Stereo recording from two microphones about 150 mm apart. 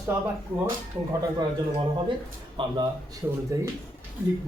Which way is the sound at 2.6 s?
35° right (ahead or behind).